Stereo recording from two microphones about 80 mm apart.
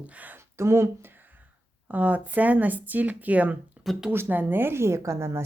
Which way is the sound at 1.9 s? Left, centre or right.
Centre.